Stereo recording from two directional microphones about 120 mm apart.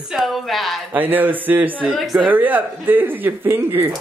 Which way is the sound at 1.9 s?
Centre (ahead or behind).